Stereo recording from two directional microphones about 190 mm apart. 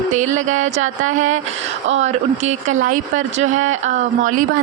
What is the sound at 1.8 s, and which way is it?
Speech, 90° right.